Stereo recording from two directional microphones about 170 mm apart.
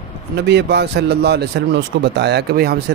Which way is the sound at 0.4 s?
85° right.